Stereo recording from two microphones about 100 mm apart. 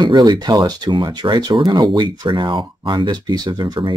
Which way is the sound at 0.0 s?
45° right (ahead or behind).